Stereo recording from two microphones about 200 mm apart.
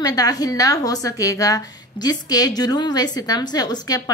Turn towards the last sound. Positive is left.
turn(degrees=20)  # may be behind; listen again after turning